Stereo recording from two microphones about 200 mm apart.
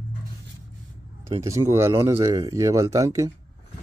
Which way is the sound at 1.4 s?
15° right (ahead or behind).